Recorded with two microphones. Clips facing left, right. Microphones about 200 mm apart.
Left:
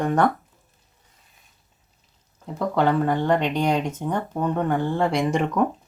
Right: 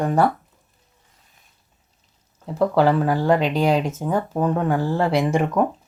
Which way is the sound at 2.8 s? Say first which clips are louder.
Right 1 dB; 5° right (ahead or behind).